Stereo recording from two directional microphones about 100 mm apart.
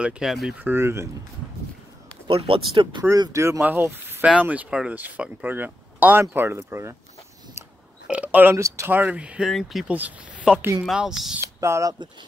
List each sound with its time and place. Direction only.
0.0 s speech: 5° right (ahead or behind)
0.6 s speech: 20° right (ahead or behind)
2.2 s speech: 65° right (ahead or behind)
3.0 s speech: 40° right (ahead or behind)
3.6 s speech: 20° right (ahead or behind)
8.1 s speech: 15° right (ahead or behind)
8.5 s speech: 30° right (ahead or behind)
8.9 s speech: 15° right (ahead or behind)
9.5 s speech: centre (ahead or behind)
9.9 s speech: 15° right (ahead or behind)
11.6 s speech: 30° right (ahead or behind)